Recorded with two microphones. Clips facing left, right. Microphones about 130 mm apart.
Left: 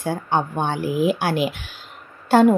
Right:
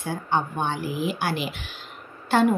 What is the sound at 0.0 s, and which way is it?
Speech, 50° left (ahead or behind).